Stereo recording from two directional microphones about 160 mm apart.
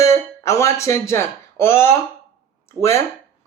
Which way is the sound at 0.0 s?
20° left (ahead or behind).